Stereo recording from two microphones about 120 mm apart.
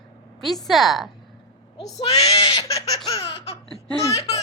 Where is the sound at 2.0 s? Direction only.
40° left (ahead or behind).